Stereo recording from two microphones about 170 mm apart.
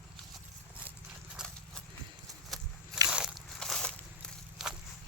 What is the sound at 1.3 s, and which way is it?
Horse, centre (ahead or behind).